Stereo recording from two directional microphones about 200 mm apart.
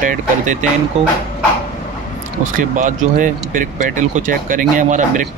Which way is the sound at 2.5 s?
40° right (ahead or behind).